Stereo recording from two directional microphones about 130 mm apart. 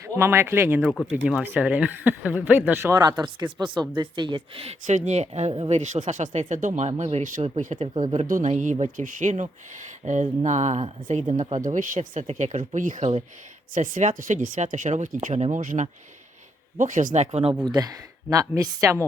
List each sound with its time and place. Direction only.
0.0 s speech: 20° right (ahead or behind); by 4.7 s 45° right (ahead or behind)
4.9 s speech: 65° right (ahead or behind)
7.5 s speech: 65° right (ahead or behind)
8.1 s speech: 70° right (ahead or behind); by 11.6 s 55° right (ahead or behind)
11.6 s speech: 80° right
17.7 s speech: 30° right (ahead or behind)